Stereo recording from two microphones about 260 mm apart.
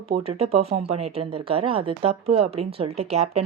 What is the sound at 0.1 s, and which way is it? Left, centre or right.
A woman's voice, right.